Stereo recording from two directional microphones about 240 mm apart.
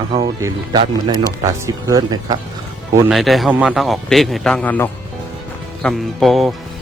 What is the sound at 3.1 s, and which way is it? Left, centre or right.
Speech, centre.